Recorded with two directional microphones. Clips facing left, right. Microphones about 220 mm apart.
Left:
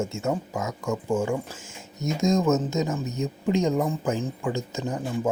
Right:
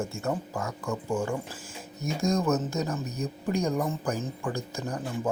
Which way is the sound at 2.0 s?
20° left (ahead or behind).